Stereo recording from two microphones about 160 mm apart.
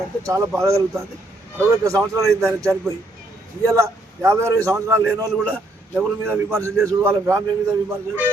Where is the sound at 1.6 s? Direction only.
20° right (ahead or behind).